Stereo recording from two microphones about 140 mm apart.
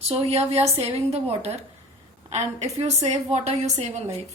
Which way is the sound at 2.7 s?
50° right (ahead or behind).